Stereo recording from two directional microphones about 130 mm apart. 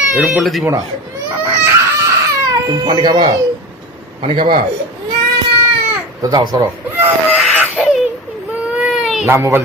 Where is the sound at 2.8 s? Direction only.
35° right (ahead or behind).